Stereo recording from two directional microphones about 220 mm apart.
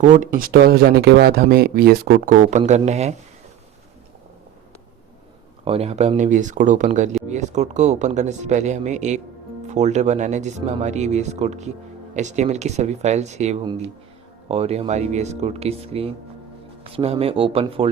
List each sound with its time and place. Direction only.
0.0 s speech: 35° right (ahead or behind)
5.6 s speech: 25° right (ahead or behind)